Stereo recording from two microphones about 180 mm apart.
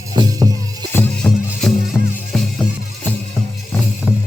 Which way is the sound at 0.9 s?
5° left (ahead or behind).